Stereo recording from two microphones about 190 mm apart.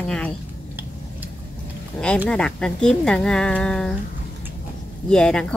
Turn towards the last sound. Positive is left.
turn(degrees=5)  # may be behind; listen again after turning